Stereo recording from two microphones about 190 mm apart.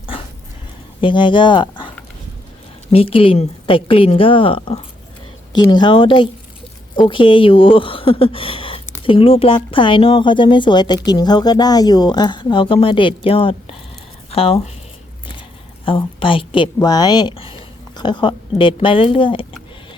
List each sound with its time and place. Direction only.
1.0 s speech: 25° left (ahead or behind)
2.9 s speech: 30° left (ahead or behind)
15.8 s a woman's voice: 30° left (ahead or behind)